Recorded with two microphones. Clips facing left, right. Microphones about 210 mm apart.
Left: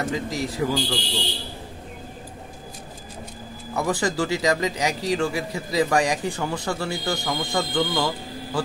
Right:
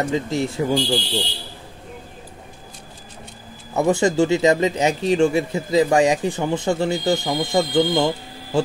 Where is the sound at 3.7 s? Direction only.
25° right (ahead or behind).